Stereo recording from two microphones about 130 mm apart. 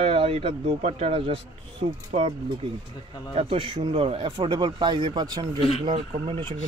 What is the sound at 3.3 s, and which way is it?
Speech, 45° right (ahead or behind).